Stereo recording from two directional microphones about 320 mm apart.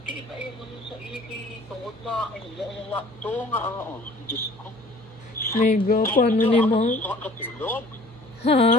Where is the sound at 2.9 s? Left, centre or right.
Centre.